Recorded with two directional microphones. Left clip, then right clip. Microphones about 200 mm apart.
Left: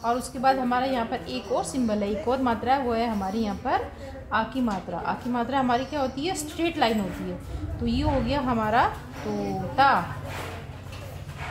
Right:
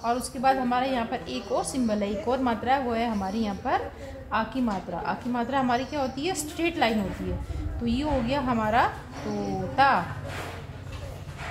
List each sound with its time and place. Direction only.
0.0 s a woman's voice: 20° left (ahead or behind)